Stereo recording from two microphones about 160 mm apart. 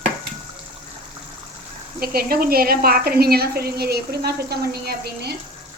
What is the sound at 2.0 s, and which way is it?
A woman's voice, 70° right (ahead or behind).